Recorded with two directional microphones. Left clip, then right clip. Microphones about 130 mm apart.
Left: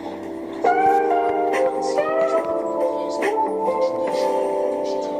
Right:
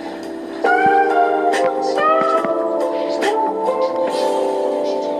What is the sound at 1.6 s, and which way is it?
Music, 30° right (ahead or behind).